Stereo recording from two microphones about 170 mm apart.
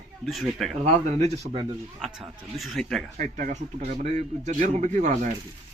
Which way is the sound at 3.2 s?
50° right (ahead or behind).